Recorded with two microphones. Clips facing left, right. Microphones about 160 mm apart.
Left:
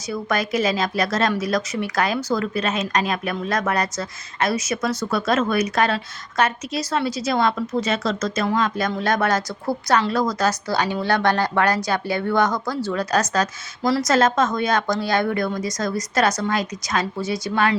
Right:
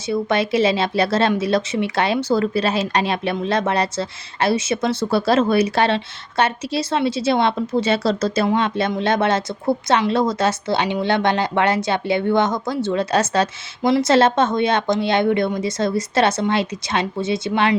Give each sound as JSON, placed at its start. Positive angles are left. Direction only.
{"t": 0.1, "sound": "speech", "side_deg": -25}